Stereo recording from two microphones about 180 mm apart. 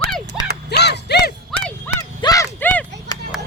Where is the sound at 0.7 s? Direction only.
65° left (ahead or behind).